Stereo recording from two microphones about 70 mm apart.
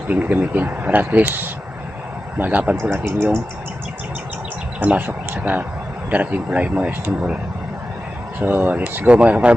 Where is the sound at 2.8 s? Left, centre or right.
Right.